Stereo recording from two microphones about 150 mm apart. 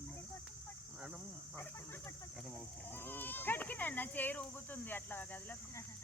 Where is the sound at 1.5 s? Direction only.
20° left (ahead or behind).